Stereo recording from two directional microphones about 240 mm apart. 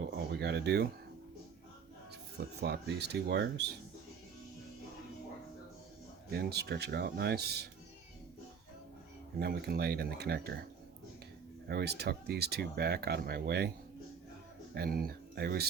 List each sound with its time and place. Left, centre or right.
0.3 s speech: right
2.6 s speech: right
6.3 s speech: right
9.4 s speech: right
11.7 s speech: right
14.8 s speech: right